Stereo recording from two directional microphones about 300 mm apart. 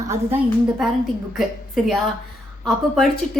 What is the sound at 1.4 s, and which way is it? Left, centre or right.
A woman's voice, centre.